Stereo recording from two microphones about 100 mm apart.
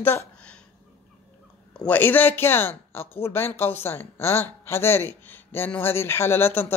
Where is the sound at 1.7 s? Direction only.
10° left (ahead or behind).